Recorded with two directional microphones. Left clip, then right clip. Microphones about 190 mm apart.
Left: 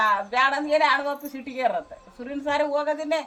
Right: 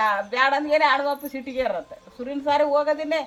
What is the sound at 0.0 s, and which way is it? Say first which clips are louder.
A woman's voice: even; 10° left (ahead or behind).